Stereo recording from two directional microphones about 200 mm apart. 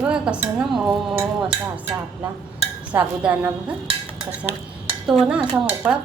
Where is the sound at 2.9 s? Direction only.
5° right (ahead or behind).